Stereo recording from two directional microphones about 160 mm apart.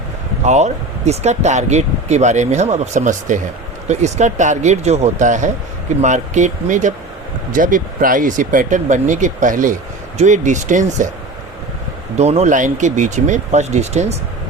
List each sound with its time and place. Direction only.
0.4 s speech: 45° right (ahead or behind)
12.1 s speech: 40° right (ahead or behind)